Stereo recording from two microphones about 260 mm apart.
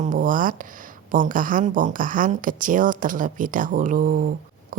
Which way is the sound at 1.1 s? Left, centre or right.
Right.